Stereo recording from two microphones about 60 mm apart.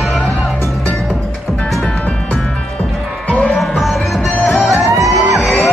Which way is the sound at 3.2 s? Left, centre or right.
Left.